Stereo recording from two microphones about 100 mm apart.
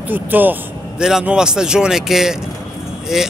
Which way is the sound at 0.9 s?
5° right (ahead or behind).